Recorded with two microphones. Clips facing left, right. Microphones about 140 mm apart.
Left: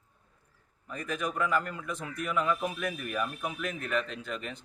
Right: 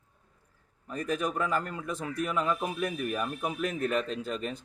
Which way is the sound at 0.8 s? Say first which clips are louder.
Right 3 dB; 35° right (ahead or behind).